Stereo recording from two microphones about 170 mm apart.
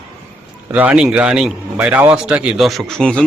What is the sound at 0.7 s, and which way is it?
Speech, 10° right (ahead or behind).